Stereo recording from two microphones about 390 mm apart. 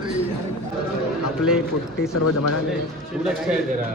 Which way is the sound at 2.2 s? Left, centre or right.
Left.